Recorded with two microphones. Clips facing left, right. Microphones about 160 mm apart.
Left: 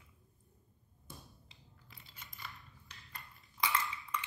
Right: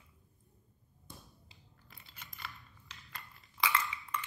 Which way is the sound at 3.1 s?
90° right.